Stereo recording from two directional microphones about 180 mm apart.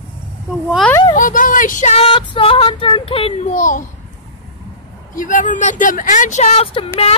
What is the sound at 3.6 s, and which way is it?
Speech, 45° left (ahead or behind).